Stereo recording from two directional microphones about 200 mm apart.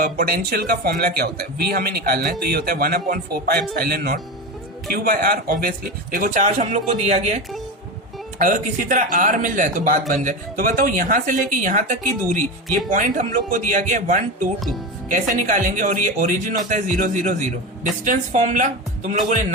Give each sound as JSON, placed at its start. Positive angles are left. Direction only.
{"t": 0.0, "sound": "a woman's voice", "side_deg": -45}